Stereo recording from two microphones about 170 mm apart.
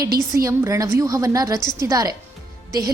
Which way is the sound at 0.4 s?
15° right (ahead or behind).